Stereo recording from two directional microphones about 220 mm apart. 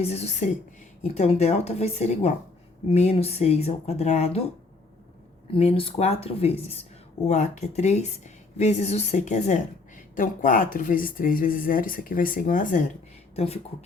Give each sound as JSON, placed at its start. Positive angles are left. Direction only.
{"t": 0.0, "sound": "a woman's voice", "side_deg": 30}
{"t": 13.3, "sound": "speech", "side_deg": 25}